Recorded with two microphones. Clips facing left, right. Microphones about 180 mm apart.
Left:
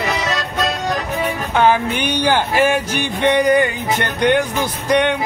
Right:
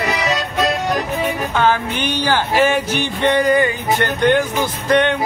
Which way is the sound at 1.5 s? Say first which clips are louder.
Left 4 dB; 15° left (ahead or behind).